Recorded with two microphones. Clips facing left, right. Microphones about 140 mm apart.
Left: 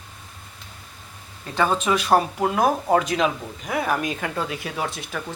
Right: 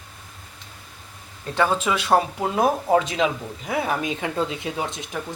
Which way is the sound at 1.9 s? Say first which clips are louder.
Left 1 dB; 30° right (ahead or behind).